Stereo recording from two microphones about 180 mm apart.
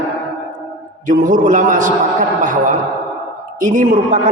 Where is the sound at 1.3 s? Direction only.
45° right (ahead or behind).